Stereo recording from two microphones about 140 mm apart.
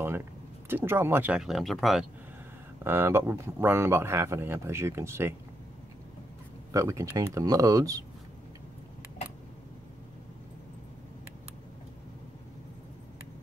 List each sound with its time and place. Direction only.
0.7 s speech: 15° right (ahead or behind); by 2.0 s centre (ahead or behind)
2.8 s speech: 15° right (ahead or behind)
6.7 s speech: 20° right (ahead or behind)